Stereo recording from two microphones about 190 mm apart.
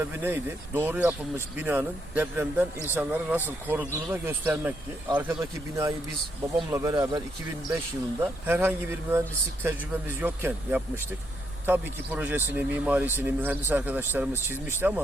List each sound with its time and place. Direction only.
0.0 s a man's voice: 10° right (ahead or behind)
8.2 s a man's voice: 10° right (ahead or behind)